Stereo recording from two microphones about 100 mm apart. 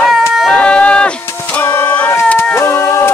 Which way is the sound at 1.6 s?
25° left (ahead or behind).